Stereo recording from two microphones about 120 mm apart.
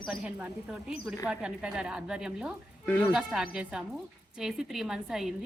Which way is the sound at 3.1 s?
5° right (ahead or behind).